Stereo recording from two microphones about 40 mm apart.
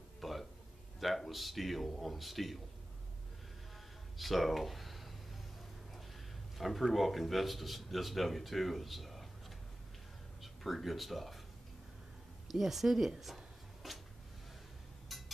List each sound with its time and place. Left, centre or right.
0.2 s a sound: centre
0.9 s speech: centre
4.2 s speech: centre
6.6 s speech: centre
10.4 s speech: centre
12.4 s speech: centre
13.8 s a sound: centre
15.0 s music: centre